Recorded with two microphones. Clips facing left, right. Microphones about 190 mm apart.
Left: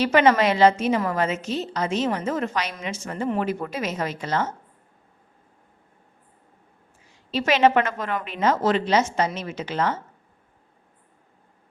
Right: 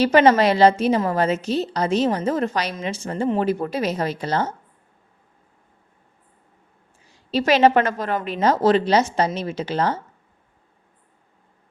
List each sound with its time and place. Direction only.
0.0 s a woman's voice: 35° right (ahead or behind)
7.1 s a woman's voice: 35° right (ahead or behind)